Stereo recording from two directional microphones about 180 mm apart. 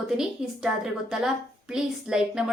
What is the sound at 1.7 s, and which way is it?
Speech, 5° right (ahead or behind).